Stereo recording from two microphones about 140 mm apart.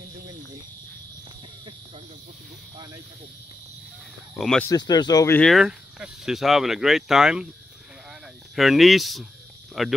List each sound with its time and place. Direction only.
4.4 s speech: 5° left (ahead or behind)
4.6 s speech: 30° left (ahead or behind)
5.3 s speech: 5° left (ahead or behind)
8.1 s snake: centre (ahead or behind)
9.8 s speech: centre (ahead or behind)